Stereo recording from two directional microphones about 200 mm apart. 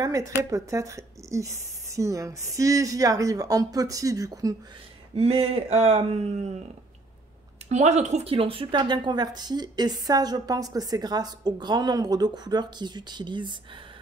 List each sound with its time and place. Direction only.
0.0 s speech: 15° right (ahead or behind)
5.1 s a woman's voice: 30° right (ahead or behind)
7.7 s a woman's voice: 35° right (ahead or behind)